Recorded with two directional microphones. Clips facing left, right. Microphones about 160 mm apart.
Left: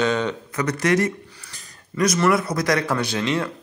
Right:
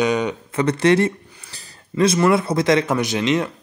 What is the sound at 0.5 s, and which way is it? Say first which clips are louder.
Speech: right 5 dB; 25° right (ahead or behind).